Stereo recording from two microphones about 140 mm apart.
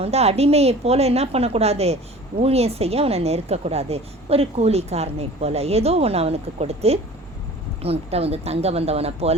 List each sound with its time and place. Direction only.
0.0 s a woman's voice: 50° right (ahead or behind)